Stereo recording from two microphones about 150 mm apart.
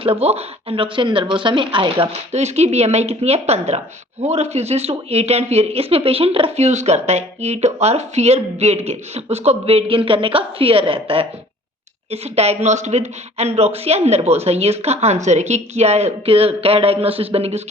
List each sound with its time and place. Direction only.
0.0 s speech: 40° right (ahead or behind)